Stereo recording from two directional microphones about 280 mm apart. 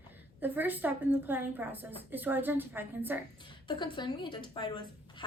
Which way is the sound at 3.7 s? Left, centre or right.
Centre.